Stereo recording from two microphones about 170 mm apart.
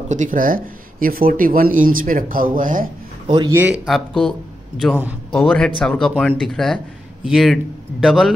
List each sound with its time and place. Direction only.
0.1 s speech: 50° right (ahead or behind)
3.3 s speech: 25° right (ahead or behind)
3.8 s speech: centre (ahead or behind)